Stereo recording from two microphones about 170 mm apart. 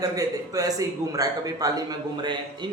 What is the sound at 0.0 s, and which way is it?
Speech, 20° right (ahead or behind).